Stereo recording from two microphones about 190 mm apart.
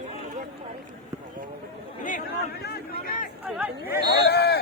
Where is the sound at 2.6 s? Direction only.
55° left (ahead or behind).